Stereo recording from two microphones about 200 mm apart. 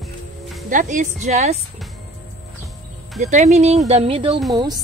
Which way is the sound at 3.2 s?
35° right (ahead or behind).